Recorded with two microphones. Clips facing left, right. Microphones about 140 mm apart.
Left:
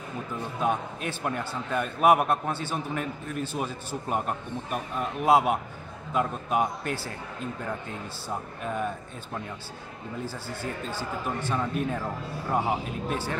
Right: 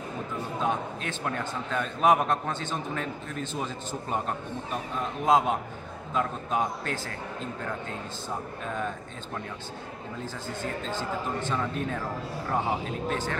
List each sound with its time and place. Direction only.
0.6 s a man's voice: 10° left (ahead or behind)
10.2 s a man's voice: 10° left (ahead or behind)